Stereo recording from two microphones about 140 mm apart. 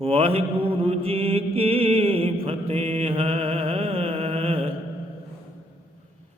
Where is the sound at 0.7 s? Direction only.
45° right (ahead or behind).